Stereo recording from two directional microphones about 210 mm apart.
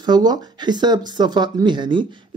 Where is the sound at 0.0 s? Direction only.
20° right (ahead or behind).